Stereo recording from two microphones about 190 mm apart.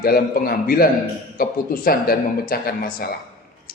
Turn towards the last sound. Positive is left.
turn(degrees=50)  # may be behind; listen again after turning